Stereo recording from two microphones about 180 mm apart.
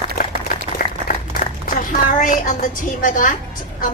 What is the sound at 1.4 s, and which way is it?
A woman's voice, 50° left (ahead or behind).